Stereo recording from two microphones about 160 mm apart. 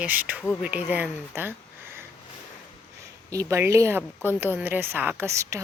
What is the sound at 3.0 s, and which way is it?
A woman's voice, 20° right (ahead or behind).